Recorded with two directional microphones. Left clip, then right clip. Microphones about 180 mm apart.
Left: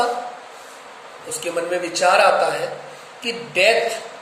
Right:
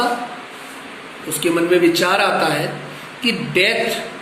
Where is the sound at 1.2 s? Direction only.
35° left (ahead or behind).